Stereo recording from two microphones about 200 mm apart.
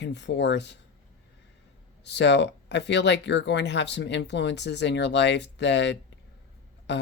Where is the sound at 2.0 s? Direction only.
60° left (ahead or behind).